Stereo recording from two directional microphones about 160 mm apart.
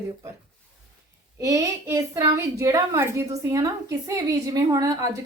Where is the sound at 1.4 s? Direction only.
20° right (ahead or behind).